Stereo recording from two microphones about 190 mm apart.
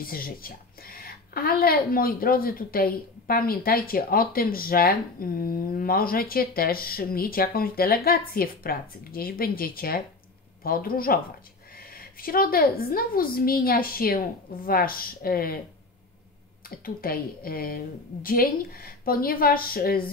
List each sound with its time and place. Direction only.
0.0 s a woman's voice: 50° left (ahead or behind)
16.6 s a woman's voice: 50° left (ahead or behind)